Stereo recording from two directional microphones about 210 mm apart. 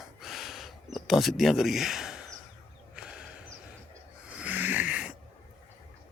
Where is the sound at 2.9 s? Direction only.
5° right (ahead or behind).